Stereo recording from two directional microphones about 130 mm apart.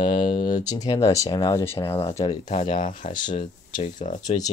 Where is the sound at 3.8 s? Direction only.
70° left (ahead or behind).